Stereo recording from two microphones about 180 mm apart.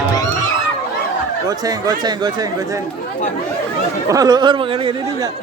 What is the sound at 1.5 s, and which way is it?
Speech, 20° right (ahead or behind).